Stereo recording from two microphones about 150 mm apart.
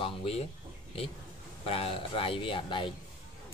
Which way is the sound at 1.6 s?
40° left (ahead or behind).